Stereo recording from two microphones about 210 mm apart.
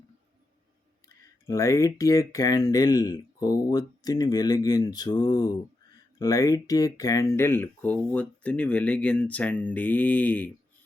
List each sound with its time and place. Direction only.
1.0 s speech: 15° left (ahead or behind)